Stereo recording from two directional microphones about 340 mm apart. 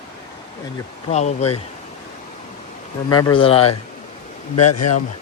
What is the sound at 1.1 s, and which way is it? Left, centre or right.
Speech, centre.